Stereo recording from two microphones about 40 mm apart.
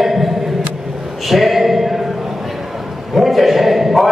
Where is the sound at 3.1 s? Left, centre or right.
Centre.